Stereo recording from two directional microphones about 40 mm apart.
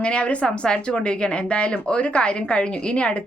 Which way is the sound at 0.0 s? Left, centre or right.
Left.